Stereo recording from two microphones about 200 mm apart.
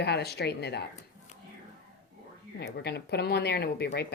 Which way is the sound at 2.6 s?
55° left (ahead or behind).